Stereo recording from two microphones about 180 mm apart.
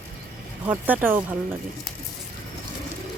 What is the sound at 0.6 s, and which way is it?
Speech, 10° right (ahead or behind).